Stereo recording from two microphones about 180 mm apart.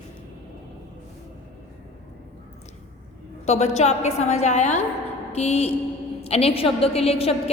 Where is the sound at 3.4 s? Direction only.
35° left (ahead or behind).